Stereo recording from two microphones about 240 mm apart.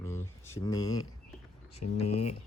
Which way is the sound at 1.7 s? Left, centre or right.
Left.